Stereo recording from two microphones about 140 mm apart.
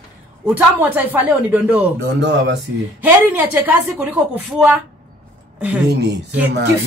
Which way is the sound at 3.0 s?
15° right (ahead or behind).